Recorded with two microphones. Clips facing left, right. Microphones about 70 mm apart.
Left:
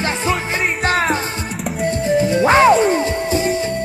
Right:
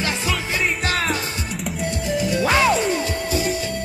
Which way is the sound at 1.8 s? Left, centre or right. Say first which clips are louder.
Left 8 dB; left.